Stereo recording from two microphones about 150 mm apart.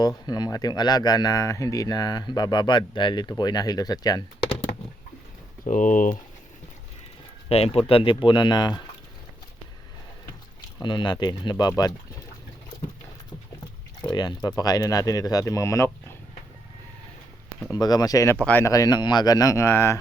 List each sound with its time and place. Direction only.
0.3 s speech: 25° left (ahead or behind)
5.6 s speech: 60° left (ahead or behind)
7.4 s speech: 40° left (ahead or behind)
10.8 s speech: 30° left (ahead or behind)
14.1 s speech: 30° left (ahead or behind)
17.7 s speech: 25° left (ahead or behind)
18.4 s speech: 10° left (ahead or behind)
18.7 s speech: 25° left (ahead or behind)